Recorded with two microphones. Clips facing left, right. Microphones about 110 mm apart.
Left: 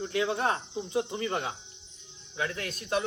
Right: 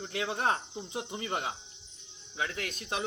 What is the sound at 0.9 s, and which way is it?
Speech, 20° right (ahead or behind).